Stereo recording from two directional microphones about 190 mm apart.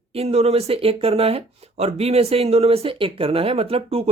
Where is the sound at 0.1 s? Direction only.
30° right (ahead or behind).